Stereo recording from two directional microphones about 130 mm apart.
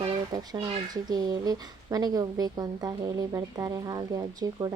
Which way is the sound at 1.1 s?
30° right (ahead or behind).